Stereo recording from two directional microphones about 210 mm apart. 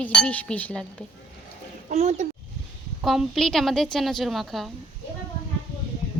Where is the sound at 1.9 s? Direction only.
30° right (ahead or behind).